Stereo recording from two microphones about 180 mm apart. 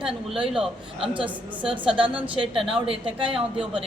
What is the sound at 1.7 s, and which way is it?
A woman's voice, 30° right (ahead or behind).